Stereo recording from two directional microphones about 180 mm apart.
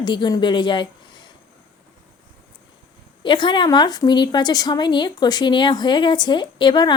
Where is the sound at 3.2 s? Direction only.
25° left (ahead or behind).